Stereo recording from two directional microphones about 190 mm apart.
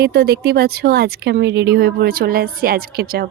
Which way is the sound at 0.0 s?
55° right (ahead or behind).